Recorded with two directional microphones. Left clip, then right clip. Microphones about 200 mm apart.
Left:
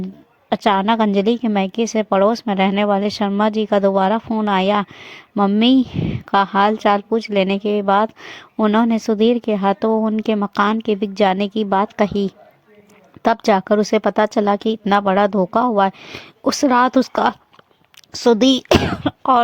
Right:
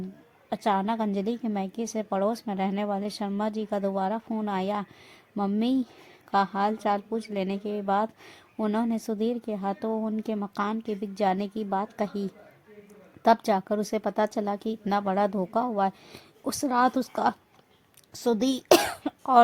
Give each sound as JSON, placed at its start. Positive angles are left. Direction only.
{"t": 0.5, "sound": "a woman's voice", "side_deg": 25}